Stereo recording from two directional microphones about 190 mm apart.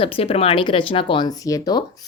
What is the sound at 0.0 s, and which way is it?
A woman's voice, 30° left (ahead or behind).